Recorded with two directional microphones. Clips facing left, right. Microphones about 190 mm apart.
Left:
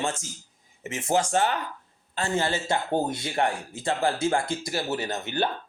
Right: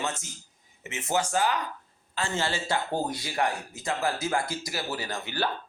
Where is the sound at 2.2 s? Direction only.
20° left (ahead or behind).